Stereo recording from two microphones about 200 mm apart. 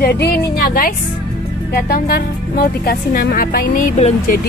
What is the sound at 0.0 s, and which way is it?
Speech, 50° left (ahead or behind).